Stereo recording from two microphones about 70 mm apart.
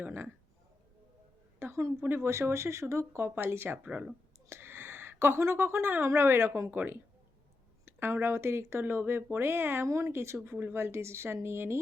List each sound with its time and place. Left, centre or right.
0.0 s speech: right
1.5 s speech: right
3.8 s speech: centre
4.4 s speech: right